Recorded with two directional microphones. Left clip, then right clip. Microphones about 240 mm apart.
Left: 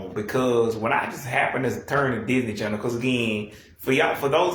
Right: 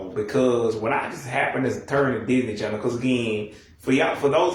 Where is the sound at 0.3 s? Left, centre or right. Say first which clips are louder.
Even; left.